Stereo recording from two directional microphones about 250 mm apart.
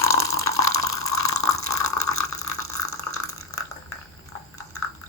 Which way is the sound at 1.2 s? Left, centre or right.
Left.